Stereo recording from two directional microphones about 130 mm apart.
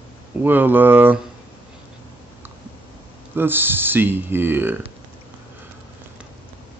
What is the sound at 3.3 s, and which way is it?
Speech, 15° right (ahead or behind).